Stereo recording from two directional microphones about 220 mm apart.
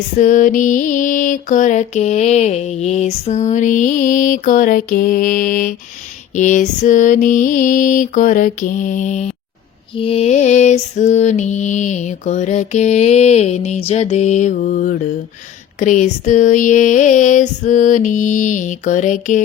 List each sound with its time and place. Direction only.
0.2 s mantra: 35° left (ahead or behind)